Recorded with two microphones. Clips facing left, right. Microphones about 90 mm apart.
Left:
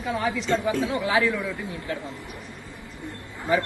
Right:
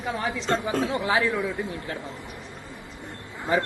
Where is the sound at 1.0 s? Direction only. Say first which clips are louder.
Left 3 dB; 30° right (ahead or behind).